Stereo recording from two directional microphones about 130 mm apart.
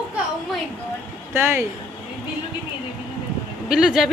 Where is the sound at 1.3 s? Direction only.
20° right (ahead or behind).